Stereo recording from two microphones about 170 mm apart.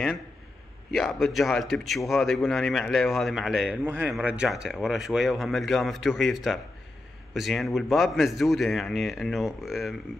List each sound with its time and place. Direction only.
0.9 s a man's voice: centre (ahead or behind)